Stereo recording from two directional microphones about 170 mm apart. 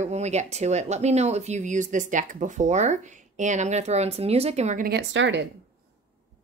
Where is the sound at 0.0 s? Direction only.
40° right (ahead or behind).